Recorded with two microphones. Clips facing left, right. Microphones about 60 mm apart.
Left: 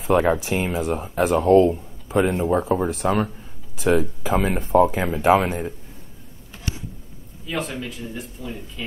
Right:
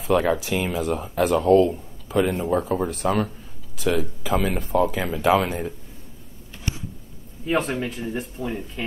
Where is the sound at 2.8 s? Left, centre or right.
Left.